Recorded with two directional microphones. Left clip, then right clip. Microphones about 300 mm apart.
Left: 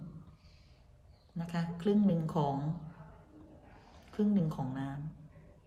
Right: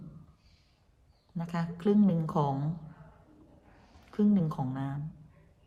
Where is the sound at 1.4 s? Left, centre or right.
Centre.